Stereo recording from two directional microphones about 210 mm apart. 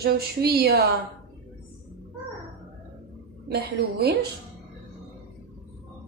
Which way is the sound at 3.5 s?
50° right (ahead or behind).